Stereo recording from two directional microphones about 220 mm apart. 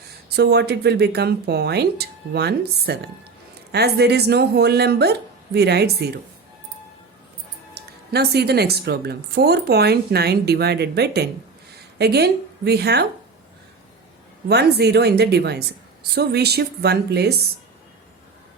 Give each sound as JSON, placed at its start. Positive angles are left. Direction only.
{"t": 0.3, "sound": "speech", "side_deg": -50}
{"t": 7.8, "sound": "speech", "side_deg": -45}
{"t": 14.4, "sound": "speech", "side_deg": -45}